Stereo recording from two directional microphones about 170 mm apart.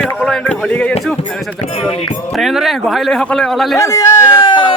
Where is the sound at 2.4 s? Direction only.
Centre (ahead or behind).